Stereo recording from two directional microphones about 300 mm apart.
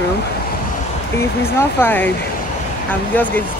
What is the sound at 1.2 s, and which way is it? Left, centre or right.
Speech, centre.